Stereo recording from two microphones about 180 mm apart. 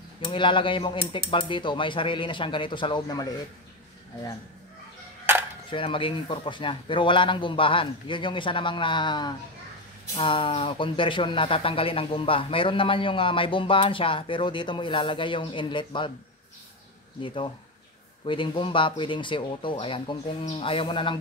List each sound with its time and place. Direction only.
0.2 s speech: 25° left (ahead or behind)
5.3 s camera: 10° right (ahead or behind)
5.7 s speech: 30° left (ahead or behind)
17.2 s speech: 30° left (ahead or behind)